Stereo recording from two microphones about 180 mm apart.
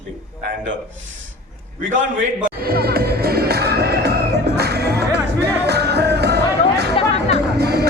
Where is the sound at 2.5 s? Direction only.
55° right (ahead or behind).